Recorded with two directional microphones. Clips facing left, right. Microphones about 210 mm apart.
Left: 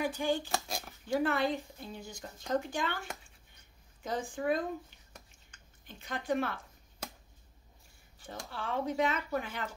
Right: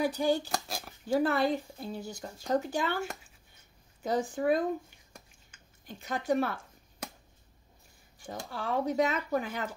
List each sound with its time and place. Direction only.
0.0 s speech: 40° right (ahead or behind)
0.5 s a sound: centre (ahead or behind)
1.0 s speech: 35° right (ahead or behind)
4.0 s speech: 40° right (ahead or behind)
5.5 s a sound: 5° right (ahead or behind)
5.9 s speech: 40° right (ahead or behind)
8.3 s speech: 40° right (ahead or behind)